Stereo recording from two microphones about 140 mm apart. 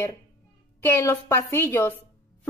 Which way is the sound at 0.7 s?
15° left (ahead or behind).